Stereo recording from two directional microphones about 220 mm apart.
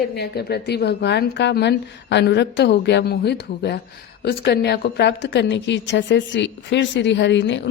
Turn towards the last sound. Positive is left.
turn(degrees=55)  # may be behind; listen again after turning